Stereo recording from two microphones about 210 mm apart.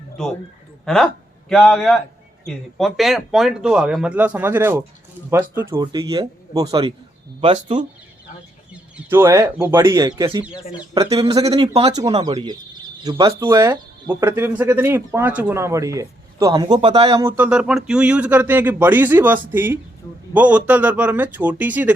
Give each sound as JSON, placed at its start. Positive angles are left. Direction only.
{"t": 0.2, "sound": "a man's voice", "side_deg": 5}
{"t": 8.7, "sound": "speech", "side_deg": -10}